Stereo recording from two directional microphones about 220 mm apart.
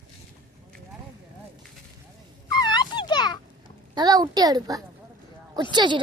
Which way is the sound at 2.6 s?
20° left (ahead or behind).